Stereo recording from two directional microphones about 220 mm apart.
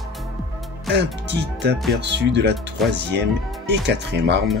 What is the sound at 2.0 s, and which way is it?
Speech, 50° right (ahead or behind).